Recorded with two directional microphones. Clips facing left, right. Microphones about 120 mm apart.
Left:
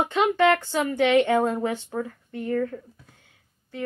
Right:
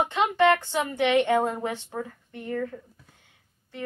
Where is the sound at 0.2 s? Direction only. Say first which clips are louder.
Left 1 dB; 25° right (ahead or behind).